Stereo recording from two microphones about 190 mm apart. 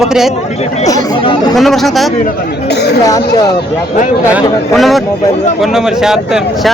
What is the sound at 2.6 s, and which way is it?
Speech, 60° left (ahead or behind).